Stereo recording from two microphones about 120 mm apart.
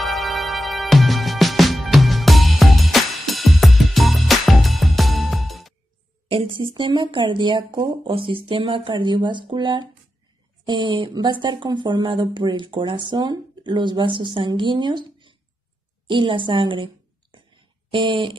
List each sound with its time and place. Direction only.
0.0 s music: centre (ahead or behind)
6.2 s a sound: 50° right (ahead or behind)
6.6 s speech: 40° right (ahead or behind)
8.0 s a woman's voice: 50° right (ahead or behind)